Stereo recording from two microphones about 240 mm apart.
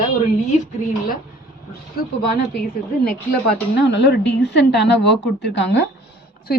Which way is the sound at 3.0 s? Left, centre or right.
Left.